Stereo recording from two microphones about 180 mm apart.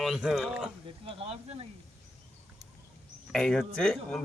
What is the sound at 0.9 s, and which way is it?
Speech, 30° right (ahead or behind).